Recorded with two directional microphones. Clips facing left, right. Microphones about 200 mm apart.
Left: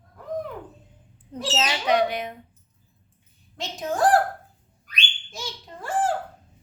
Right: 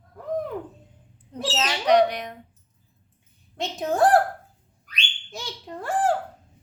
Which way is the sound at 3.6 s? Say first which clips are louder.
Right 2 dB; 60° right (ahead or behind).